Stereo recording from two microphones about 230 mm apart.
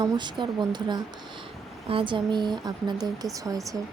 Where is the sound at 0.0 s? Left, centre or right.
Centre.